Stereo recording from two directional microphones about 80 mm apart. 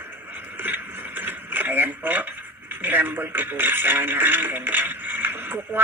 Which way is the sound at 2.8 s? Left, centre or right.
Right.